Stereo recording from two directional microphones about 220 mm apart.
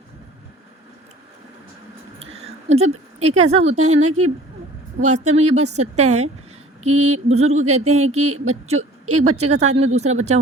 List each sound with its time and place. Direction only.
2.1 s a sound: 25° right (ahead or behind)
3.2 s a woman's voice: 30° right (ahead or behind)
6.9 s a sound: 75° right (ahead or behind)
7.3 s a woman's voice: 30° right (ahead or behind)
9.0 s a woman's voice: 85° right
9.5 s speech: 30° right (ahead or behind)